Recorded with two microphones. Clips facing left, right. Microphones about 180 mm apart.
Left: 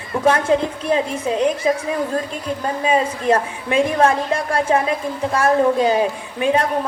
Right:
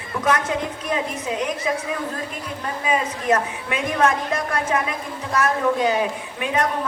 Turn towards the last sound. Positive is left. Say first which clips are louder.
# left 5 dB
turn(degrees=30)  # may be behind; listen again after turning